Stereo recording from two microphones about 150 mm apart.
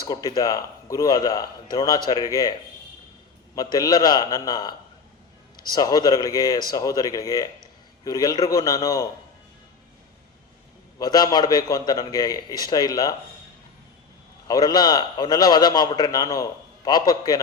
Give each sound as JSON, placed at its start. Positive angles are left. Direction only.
{"t": 0.0, "sound": "a man's voice", "side_deg": 25}
{"t": 11.0, "sound": "a man's voice", "side_deg": 25}
{"t": 14.4, "sound": "a man's voice", "side_deg": 25}